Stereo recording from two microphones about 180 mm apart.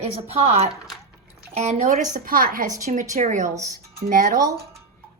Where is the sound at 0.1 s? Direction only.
35° right (ahead or behind).